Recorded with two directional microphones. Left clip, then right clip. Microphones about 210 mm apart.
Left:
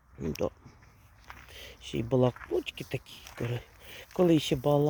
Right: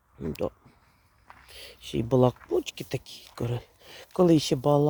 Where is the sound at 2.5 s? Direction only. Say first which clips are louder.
Right 4 dB; 30° right (ahead or behind).